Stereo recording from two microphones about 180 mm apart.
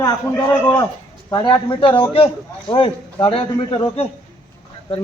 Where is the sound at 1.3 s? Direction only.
25° left (ahead or behind).